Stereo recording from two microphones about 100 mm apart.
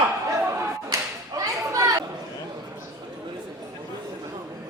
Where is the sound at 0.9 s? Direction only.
35° right (ahead or behind).